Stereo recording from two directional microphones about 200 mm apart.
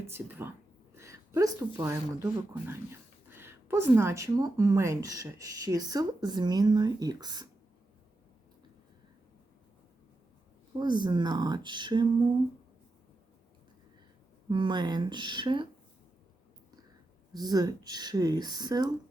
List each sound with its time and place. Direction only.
0.0 s a woman's voice: 10° right (ahead or behind)
10.8 s speech: 20° right (ahead or behind)
14.5 s speech: 25° right (ahead or behind)
17.3 s speech: 20° right (ahead or behind)